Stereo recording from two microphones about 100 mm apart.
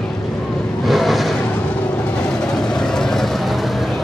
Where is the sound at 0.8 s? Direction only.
Centre (ahead or behind).